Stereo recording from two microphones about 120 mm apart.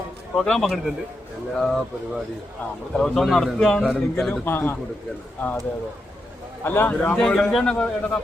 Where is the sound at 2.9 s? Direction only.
5° left (ahead or behind).